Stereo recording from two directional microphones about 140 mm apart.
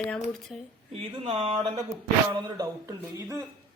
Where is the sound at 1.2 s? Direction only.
45° right (ahead or behind).